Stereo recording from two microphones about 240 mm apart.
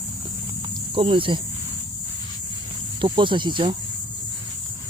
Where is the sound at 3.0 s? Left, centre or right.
Centre.